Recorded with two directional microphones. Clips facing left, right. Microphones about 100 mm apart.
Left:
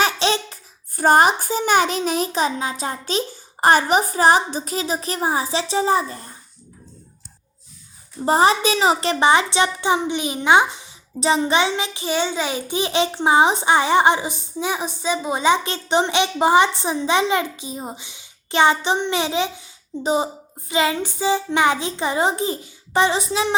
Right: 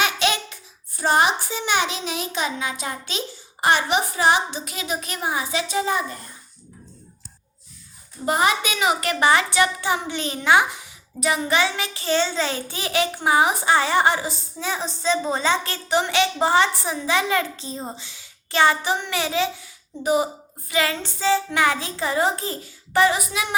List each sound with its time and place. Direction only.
0.0 s a sound: 30° left (ahead or behind)
0.9 s a child's voice: 45° left (ahead or behind)
8.2 s a child's voice: 30° left (ahead or behind)